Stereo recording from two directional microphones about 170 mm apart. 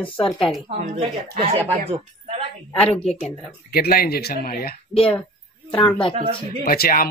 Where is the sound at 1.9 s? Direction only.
35° right (ahead or behind).